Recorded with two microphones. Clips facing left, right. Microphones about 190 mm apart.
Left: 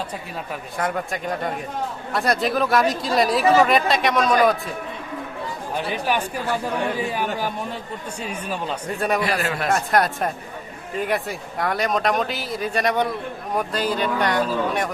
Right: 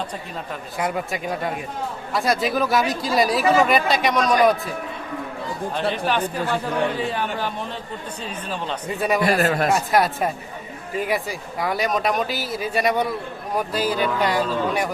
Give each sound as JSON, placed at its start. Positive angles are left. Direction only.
{"t": 0.8, "sound": "speech", "side_deg": -10}
{"t": 5.9, "sound": "speech", "side_deg": 10}
{"t": 9.0, "sound": "speech", "side_deg": 0}
{"t": 9.4, "sound": "speech", "side_deg": -45}
{"t": 9.6, "sound": "speech", "side_deg": 0}